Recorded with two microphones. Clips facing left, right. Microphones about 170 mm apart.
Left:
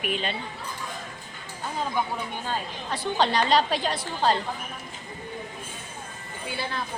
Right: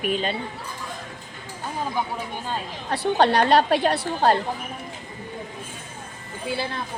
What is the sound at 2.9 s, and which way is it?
A woman's voice, 60° right (ahead or behind).